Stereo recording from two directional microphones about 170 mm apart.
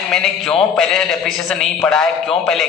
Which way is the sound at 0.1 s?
Centre (ahead or behind).